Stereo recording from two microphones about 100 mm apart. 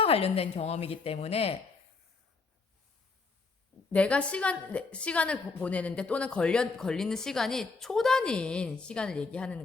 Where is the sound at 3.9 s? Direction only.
10° left (ahead or behind).